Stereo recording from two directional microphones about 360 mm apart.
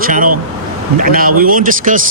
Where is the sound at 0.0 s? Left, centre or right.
Right.